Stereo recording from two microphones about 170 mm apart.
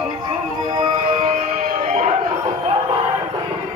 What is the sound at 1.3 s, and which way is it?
Music, 50° right (ahead or behind).